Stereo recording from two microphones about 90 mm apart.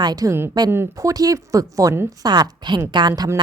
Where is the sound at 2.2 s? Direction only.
50° right (ahead or behind).